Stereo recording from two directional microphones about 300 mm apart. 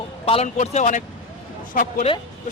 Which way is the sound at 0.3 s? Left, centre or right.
Left.